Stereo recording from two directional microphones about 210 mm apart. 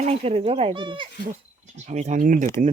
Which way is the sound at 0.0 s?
30° right (ahead or behind).